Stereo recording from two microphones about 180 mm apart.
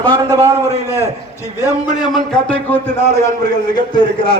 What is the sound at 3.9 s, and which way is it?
Speech, 30° left (ahead or behind).